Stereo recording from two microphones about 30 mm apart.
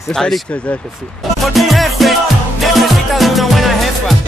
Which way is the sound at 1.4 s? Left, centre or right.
Centre.